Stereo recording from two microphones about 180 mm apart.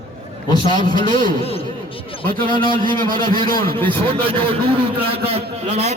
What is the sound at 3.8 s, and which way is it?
A man's voice, 30° right (ahead or behind).